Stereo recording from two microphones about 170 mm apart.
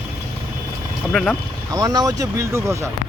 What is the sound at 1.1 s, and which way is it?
Speech, 5° left (ahead or behind).